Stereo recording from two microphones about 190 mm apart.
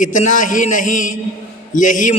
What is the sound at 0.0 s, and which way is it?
A man's voice, 40° left (ahead or behind).